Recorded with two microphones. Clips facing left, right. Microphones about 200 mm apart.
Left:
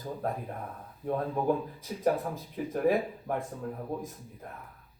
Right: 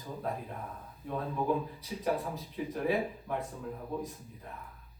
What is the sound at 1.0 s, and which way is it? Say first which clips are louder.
A man's voice: left 4 dB; 50° left (ahead or behind).